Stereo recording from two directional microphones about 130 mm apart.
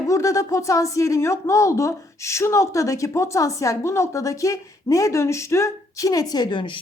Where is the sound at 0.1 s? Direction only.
25° left (ahead or behind).